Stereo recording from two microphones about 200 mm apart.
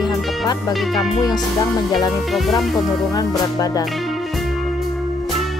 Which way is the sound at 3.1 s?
20° left (ahead or behind).